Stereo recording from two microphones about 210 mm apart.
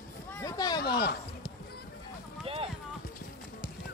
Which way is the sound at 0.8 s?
50° left (ahead or behind).